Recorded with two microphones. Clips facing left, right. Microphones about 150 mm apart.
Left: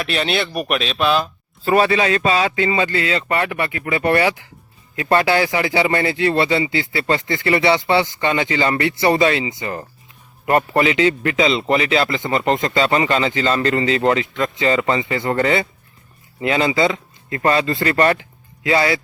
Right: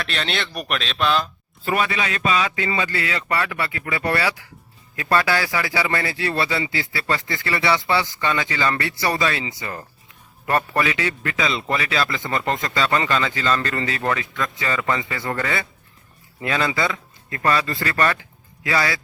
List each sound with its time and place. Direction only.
0.0 s speech: 10° left (ahead or behind)
1.6 s a man's voice: 35° left (ahead or behind)